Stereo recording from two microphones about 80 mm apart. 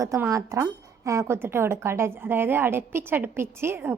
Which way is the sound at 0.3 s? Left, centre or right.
Right.